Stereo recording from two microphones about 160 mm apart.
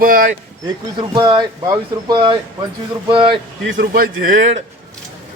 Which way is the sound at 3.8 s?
65° right (ahead or behind).